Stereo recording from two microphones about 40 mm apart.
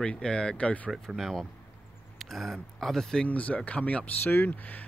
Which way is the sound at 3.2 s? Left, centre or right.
Left.